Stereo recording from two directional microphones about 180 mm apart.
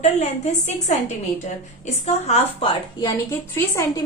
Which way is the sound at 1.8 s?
40° left (ahead or behind).